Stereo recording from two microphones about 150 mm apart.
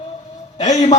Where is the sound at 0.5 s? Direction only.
50° left (ahead or behind).